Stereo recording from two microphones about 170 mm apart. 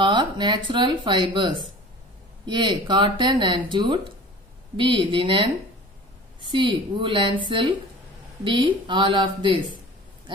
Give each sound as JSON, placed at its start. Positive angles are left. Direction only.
{"t": 0.0, "sound": "a woman's voice", "side_deg": -25}
{"t": 6.5, "sound": "speech", "side_deg": -30}